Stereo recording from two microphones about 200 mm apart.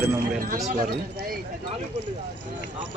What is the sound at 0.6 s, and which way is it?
Speech, 45° right (ahead or behind).